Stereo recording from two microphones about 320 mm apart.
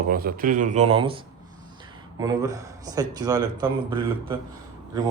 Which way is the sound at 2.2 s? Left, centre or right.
Centre.